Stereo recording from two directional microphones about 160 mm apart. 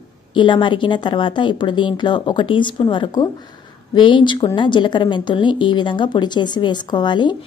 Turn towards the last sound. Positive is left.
turn(degrees=30)  # may be behind; listen again after turning